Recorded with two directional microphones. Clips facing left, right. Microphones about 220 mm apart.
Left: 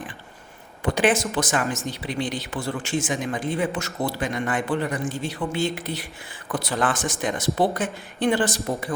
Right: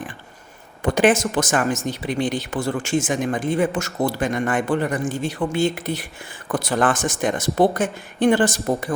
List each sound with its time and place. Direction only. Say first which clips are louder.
0.8 s speech: right 4 dB; 45° right (ahead or behind)